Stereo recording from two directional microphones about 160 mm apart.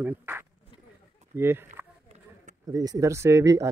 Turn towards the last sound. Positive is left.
turn(degrees=-20)  # may be behind; listen again after turning